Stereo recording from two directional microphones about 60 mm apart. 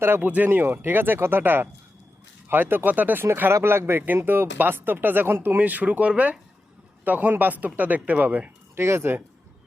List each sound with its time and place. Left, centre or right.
0.0 s speech: right
3.5 s speech: right
8.7 s speech: right